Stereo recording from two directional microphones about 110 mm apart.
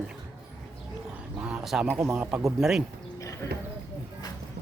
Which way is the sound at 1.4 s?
5° right (ahead or behind).